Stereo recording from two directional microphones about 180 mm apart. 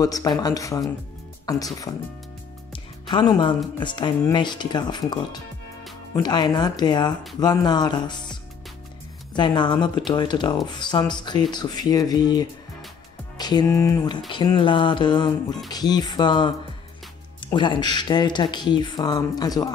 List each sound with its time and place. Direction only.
0.0 s speech: 20° left (ahead or behind)
6.1 s speech: 25° left (ahead or behind)